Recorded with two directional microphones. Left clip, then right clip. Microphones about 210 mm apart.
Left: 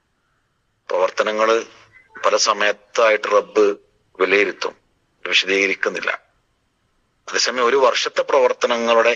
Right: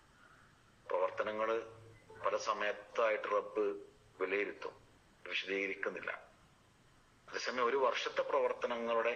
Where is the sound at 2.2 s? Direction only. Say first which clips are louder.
Left 19 dB; 50° left (ahead or behind).